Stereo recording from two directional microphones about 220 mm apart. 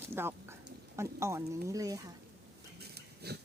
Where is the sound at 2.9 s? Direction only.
45° right (ahead or behind).